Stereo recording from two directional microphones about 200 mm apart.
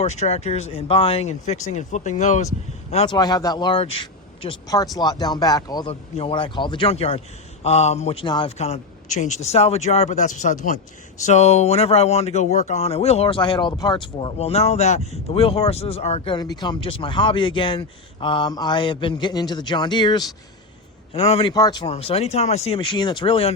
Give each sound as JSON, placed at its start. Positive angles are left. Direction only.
{"t": 0.0, "sound": "speech", "side_deg": 35}
{"t": 3.2, "sound": "speech", "side_deg": 20}